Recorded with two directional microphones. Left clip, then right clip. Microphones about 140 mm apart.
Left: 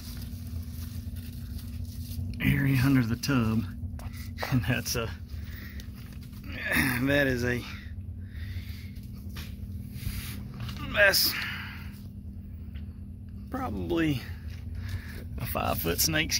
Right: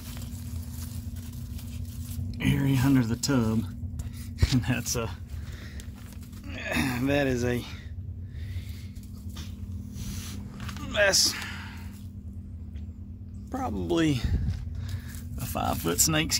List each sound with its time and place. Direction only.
2.3 s a sound: centre (ahead or behind)
2.6 s a sound: 55° left (ahead or behind)
3.1 s speech: 5° left (ahead or behind)
6.5 s speech: 15° right (ahead or behind)
9.9 s a sound: 15° right (ahead or behind)
13.5 s speech: 25° right (ahead or behind)
13.8 s speech: 40° right (ahead or behind)
15.3 s speech: centre (ahead or behind)
16.0 s speech: 30° right (ahead or behind)